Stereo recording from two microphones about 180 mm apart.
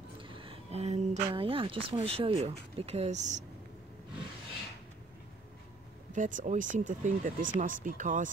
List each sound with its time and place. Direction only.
0.2 s a woman's voice: 30° right (ahead or behind)
6.1 s speech: 45° right (ahead or behind)